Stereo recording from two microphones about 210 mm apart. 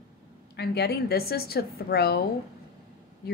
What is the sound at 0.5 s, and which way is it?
A woman's voice, 50° left (ahead or behind).